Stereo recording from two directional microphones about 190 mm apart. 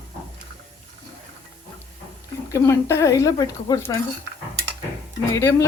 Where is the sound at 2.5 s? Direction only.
15° left (ahead or behind).